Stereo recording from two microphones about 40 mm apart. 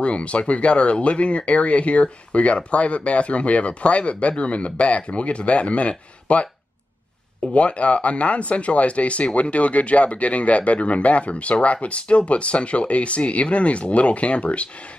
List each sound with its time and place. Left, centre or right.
0.0 s speech: left
7.5 s speech: left